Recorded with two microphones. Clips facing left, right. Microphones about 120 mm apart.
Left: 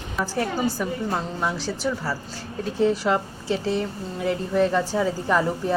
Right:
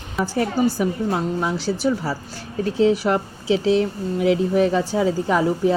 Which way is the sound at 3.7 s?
80° right.